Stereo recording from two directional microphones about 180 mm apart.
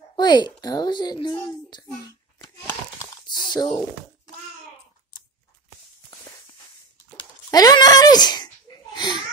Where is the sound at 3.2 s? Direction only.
25° left (ahead or behind).